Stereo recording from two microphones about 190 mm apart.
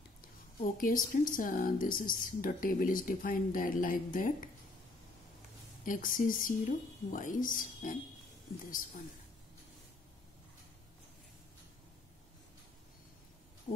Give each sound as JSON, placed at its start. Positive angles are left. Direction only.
{"t": 0.6, "sound": "speech", "side_deg": 45}
{"t": 5.9, "sound": "speech", "side_deg": 45}